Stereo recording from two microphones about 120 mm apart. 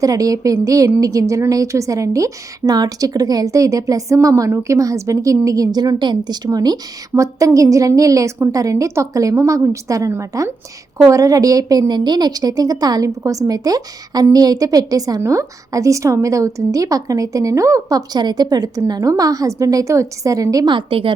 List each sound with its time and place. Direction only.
0.0 s a woman's voice: 30° right (ahead or behind); by 21.1 s 45° right (ahead or behind)